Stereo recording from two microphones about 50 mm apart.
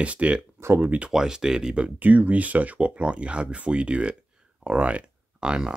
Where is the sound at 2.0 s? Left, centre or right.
Right; by 5.7 s centre.